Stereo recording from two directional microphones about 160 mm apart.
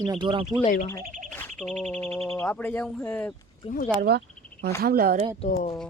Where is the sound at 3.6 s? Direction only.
40° left (ahead or behind).